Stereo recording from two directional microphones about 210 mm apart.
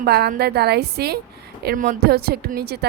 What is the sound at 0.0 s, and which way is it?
A woman's voice, 45° right (ahead or behind).